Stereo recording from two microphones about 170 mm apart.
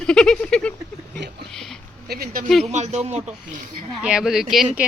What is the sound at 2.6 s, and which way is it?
Speech, 40° right (ahead or behind).